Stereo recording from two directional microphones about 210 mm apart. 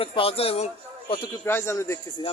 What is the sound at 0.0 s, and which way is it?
Speech, 25° left (ahead or behind).